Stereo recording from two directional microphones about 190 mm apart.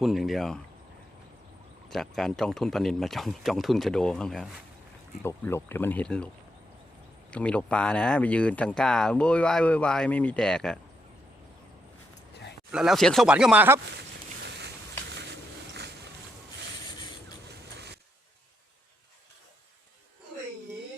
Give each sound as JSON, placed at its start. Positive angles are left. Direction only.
{"t": 0.0, "sound": "speech", "side_deg": 0}
{"t": 1.9, "sound": "speech", "side_deg": 0}
{"t": 7.3, "sound": "speech", "side_deg": 5}
{"t": 12.7, "sound": "speech", "side_deg": 0}
{"t": 15.1, "sound": "vehicle", "side_deg": -65}
{"t": 17.7, "sound": "vehicle", "side_deg": -60}